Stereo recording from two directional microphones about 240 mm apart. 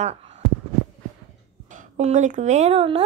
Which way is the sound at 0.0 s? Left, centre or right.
Right.